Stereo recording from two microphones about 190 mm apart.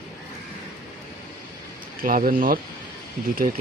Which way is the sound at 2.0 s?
45° right (ahead or behind).